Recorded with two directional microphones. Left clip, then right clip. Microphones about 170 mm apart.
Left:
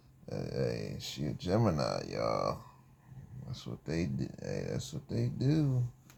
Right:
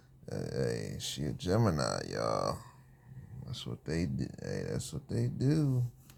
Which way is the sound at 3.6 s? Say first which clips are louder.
Even; 40° right (ahead or behind).